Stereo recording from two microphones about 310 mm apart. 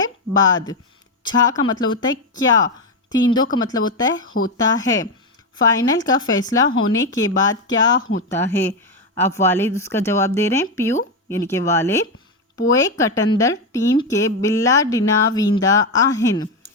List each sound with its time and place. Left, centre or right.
0.0 s speech: centre